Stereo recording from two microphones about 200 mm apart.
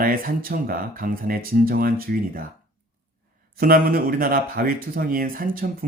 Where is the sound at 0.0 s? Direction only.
45° right (ahead or behind).